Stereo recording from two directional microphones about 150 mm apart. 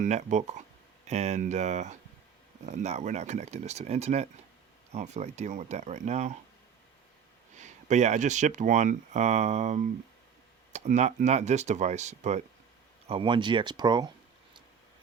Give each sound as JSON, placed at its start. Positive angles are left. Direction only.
{"t": 0.0, "sound": "speech", "side_deg": -50}
{"t": 7.6, "sound": "speech", "side_deg": -50}
{"t": 13.1, "sound": "speech", "side_deg": -35}